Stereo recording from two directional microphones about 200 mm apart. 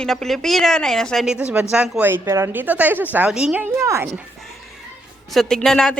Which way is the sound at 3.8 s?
15° right (ahead or behind).